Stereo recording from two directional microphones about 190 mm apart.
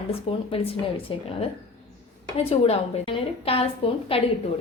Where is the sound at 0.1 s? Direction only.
30° left (ahead or behind).